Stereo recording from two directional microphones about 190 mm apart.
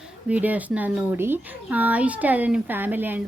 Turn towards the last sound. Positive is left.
turn(degrees=-10)  # may be behind; listen again after turning